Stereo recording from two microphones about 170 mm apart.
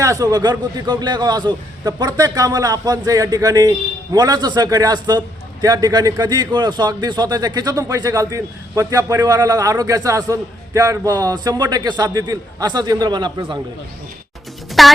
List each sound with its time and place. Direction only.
0.0 s a man's voice: 20° right (ahead or behind)
14.8 s a woman's voice: centre (ahead or behind)